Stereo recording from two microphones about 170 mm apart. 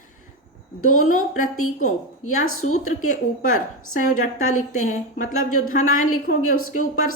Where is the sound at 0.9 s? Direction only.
50° left (ahead or behind).